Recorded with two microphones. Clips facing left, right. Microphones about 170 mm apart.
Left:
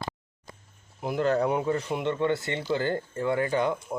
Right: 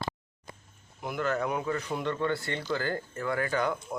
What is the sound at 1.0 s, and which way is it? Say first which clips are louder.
Speech: left 5 dB; 30° left (ahead or behind).